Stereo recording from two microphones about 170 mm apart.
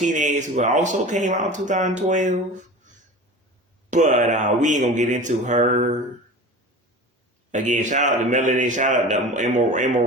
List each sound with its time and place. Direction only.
0.0 s a man's voice: 45° right (ahead or behind)
3.8 s a man's voice: 45° right (ahead or behind)
7.5 s a man's voice: 45° right (ahead or behind)